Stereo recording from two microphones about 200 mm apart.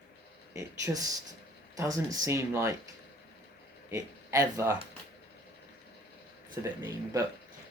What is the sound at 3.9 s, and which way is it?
Speech, 15° right (ahead or behind).